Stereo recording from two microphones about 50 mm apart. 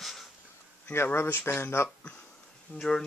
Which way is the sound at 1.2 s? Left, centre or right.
Left.